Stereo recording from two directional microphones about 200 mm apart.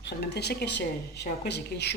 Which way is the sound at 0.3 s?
55° left (ahead or behind).